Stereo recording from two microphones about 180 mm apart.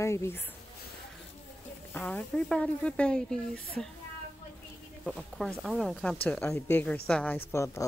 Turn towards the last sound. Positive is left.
turn(degrees=15)  # may be behind; listen again after turning